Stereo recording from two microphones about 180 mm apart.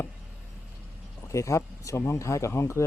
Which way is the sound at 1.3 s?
15° left (ahead or behind).